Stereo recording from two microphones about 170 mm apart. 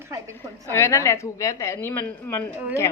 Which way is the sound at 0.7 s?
15° left (ahead or behind).